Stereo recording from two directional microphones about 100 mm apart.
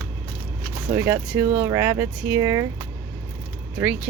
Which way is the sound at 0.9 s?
25° right (ahead or behind).